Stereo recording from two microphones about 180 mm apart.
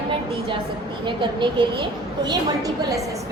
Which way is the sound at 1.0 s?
25° right (ahead or behind).